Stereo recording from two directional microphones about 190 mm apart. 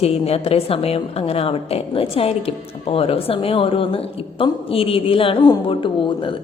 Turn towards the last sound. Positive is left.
turn(degrees=25)  # may be behind; listen again after turning